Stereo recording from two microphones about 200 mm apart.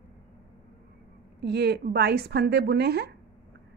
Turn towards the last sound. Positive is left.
turn(degrees=-55)  # may be behind; listen again after turning